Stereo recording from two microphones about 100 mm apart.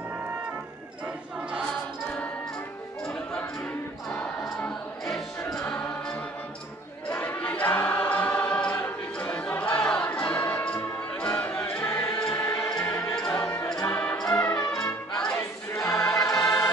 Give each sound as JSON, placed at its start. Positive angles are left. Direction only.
{"t": 4.1, "sound": "music", "side_deg": 10}
{"t": 7.1, "sound": "choir", "side_deg": 15}
{"t": 9.2, "sound": "music", "side_deg": 15}
{"t": 12.4, "sound": "music", "side_deg": 25}
{"t": 12.9, "sound": "music", "side_deg": 5}
{"t": 13.3, "sound": "music", "side_deg": 15}
{"t": 15.7, "sound": "choir", "side_deg": 10}
{"t": 16.0, "sound": "choir", "side_deg": 35}
{"t": 16.3, "sound": "choir", "side_deg": 10}